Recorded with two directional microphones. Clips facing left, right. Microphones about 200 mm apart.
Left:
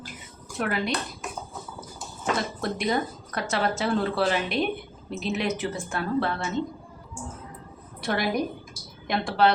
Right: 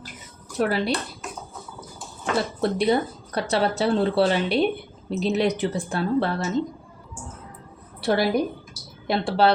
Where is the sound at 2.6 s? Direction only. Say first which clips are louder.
Right 8 dB; 30° right (ahead or behind).